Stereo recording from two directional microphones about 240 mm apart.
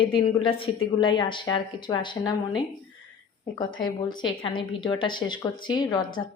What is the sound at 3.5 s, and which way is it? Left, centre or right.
A woman's voice, centre.